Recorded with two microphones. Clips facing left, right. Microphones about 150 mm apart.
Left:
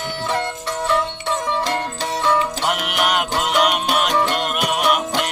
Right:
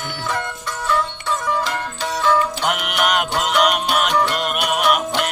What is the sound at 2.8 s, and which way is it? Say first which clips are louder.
Music: even; centre (ahead or behind).